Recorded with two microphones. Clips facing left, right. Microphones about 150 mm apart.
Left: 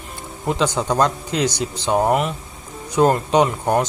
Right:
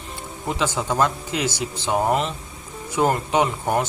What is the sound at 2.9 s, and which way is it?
Speech, 20° left (ahead or behind).